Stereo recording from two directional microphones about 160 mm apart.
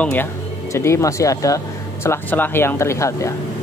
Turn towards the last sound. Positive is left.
turn(degrees=20)  # may be behind; listen again after turning